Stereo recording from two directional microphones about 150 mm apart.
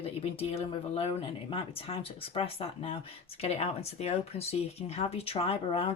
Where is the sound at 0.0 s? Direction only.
40° left (ahead or behind).